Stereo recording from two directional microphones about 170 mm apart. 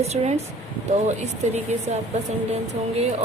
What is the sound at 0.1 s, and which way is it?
Speech, 40° right (ahead or behind).